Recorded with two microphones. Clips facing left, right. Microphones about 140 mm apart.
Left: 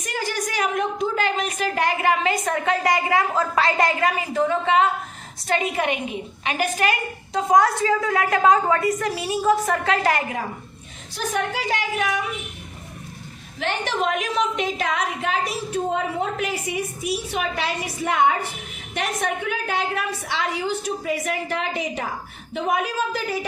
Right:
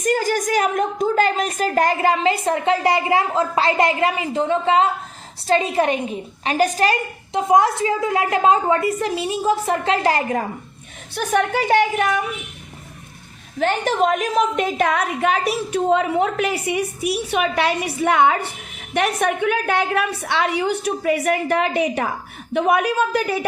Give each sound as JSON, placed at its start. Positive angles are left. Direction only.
{"t": 0.0, "sound": "a woman's voice", "side_deg": -45}
{"t": 7.3, "sound": "a woman's voice", "side_deg": -25}
{"t": 11.1, "sound": "a woman's voice", "side_deg": -60}
{"t": 13.6, "sound": "a woman's voice", "side_deg": -45}
{"t": 18.9, "sound": "a woman's voice", "side_deg": -65}